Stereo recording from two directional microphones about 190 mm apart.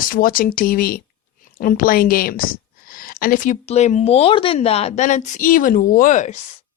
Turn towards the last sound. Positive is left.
turn(degrees=40)  # may be behind; listen again after turning